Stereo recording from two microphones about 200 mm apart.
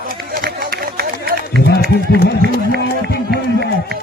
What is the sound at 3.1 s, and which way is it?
Run, 55° left (ahead or behind).